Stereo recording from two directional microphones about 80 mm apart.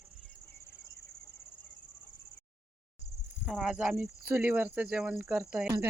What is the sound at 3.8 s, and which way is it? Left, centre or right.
Speech, centre.